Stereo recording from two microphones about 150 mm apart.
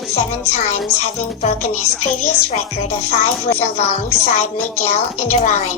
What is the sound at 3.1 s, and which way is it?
A woman's voice, 45° left (ahead or behind).